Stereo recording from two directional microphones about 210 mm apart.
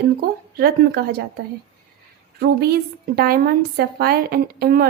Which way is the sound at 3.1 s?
45° right (ahead or behind).